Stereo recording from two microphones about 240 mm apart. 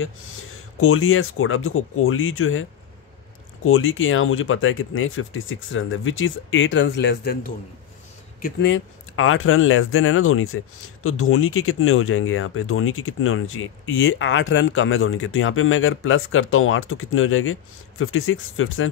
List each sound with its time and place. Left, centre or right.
0.7 s speech: left
3.6 s speech: left
8.6 s speech: left